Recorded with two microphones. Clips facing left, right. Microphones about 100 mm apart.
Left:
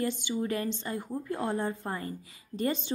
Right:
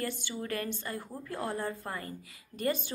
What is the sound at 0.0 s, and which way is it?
A woman's voice, 20° left (ahead or behind).